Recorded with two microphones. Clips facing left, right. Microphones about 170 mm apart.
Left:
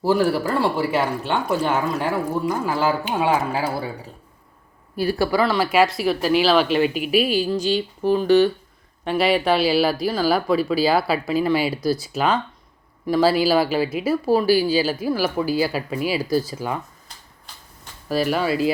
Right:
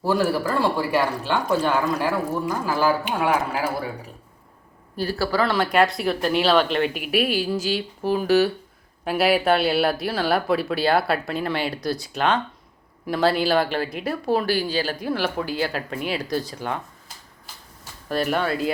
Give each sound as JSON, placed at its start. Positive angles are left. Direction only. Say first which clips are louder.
{"t": 0.1, "sound": "speech", "louder": "left 2 dB", "side_deg": 20}
{"t": 4.9, "sound": "speech", "louder": "left 4 dB", "side_deg": 15}
{"t": 5.4, "sound": "speech", "louder": "even", "side_deg": 0}
{"t": 18.1, "sound": "speech", "louder": "left 2 dB", "side_deg": 5}